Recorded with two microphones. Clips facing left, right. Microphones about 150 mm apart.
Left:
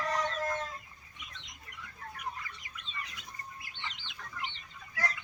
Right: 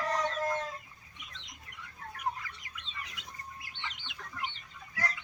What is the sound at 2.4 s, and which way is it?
Chicken, 90° right.